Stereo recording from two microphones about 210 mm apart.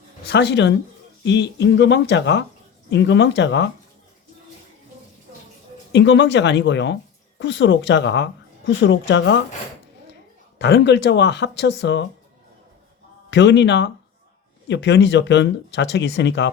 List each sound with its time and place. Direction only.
0.3 s a woman's voice: 55° left (ahead or behind)
5.9 s a woman's voice: 55° left (ahead or behind)
10.6 s a woman's voice: 55° left (ahead or behind)
13.3 s a woman's voice: 55° left (ahead or behind)